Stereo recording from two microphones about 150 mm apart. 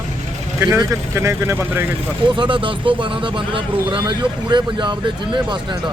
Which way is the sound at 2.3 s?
30° right (ahead or behind).